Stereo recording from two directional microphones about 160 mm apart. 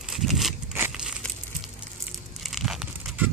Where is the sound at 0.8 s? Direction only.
15° right (ahead or behind).